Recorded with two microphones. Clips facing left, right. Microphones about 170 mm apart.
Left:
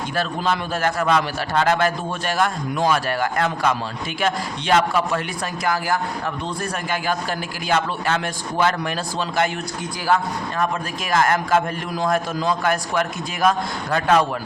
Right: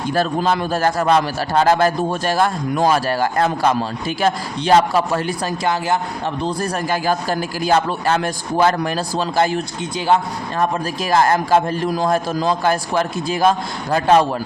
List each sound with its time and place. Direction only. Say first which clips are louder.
0.1 s a man's voice: right 5 dB; 40° right (ahead or behind)
6.4 s a man's voice: right 5 dB; 35° right (ahead or behind)
11.1 s a man's voice: right 3 dB; 30° right (ahead or behind)